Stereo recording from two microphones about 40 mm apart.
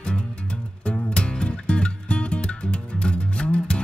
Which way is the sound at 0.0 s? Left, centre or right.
Left.